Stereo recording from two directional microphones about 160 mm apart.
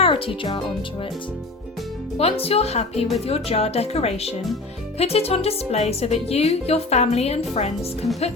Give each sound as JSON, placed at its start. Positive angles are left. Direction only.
{"t": 0.0, "sound": "speech", "side_deg": 35}
{"t": 2.1, "sound": "speech", "side_deg": 35}